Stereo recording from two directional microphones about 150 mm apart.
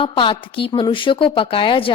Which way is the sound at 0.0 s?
35° left (ahead or behind).